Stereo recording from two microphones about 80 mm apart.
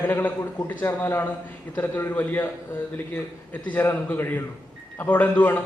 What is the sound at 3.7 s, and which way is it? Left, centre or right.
A man's voice, left.